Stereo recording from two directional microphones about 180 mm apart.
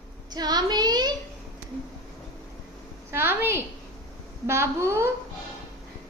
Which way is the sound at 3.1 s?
10° right (ahead or behind).